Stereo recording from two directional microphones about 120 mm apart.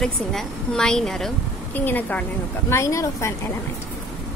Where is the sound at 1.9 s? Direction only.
15° left (ahead or behind).